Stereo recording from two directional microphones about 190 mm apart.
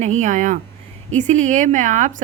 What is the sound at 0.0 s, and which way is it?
A woman's voice, 40° right (ahead or behind).